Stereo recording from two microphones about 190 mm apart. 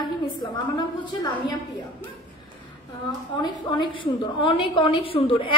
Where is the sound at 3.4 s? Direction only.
20° left (ahead or behind).